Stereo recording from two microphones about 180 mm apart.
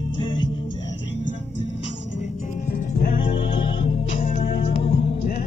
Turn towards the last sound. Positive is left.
turn(degrees=30)  # may be behind; listen again after turning